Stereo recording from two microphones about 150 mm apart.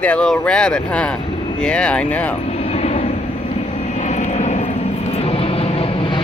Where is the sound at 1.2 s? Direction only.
35° left (ahead or behind).